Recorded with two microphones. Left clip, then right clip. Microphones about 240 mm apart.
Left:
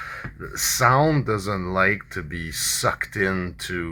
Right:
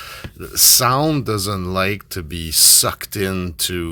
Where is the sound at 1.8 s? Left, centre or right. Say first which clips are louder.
Left 1 dB; right.